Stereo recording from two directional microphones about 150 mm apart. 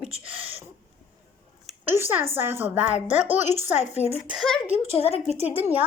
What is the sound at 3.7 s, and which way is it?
Speech, 45° left (ahead or behind).